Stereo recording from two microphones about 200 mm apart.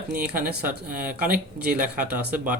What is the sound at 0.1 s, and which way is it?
Speech, 45° right (ahead or behind).